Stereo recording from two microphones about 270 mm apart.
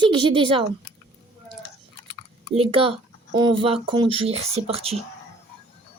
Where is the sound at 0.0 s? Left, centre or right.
Centre.